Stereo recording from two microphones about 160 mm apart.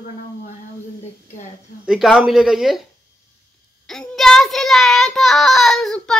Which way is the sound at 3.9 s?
5° left (ahead or behind).